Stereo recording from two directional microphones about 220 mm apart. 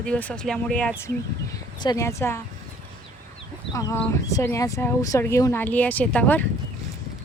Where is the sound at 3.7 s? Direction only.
15° left (ahead or behind).